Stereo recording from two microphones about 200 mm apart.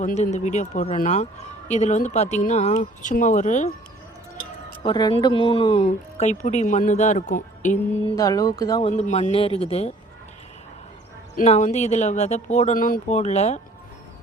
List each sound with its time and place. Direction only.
0.0 s speech: 35° left (ahead or behind)
4.8 s speech: 25° left (ahead or behind); by 8.1 s 40° left (ahead or behind)
8.1 s speech: 15° left (ahead or behind)
8.8 s speech: 35° left (ahead or behind)
11.3 s speech: 35° left (ahead or behind)